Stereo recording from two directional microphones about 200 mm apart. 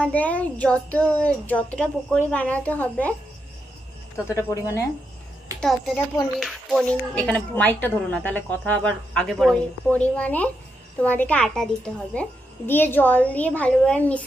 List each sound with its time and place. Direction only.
0.0 s a woman's voice: 5° left (ahead or behind)
4.3 s a woman's voice: 15° left (ahead or behind)
6.4 s a woman's voice: centre (ahead or behind)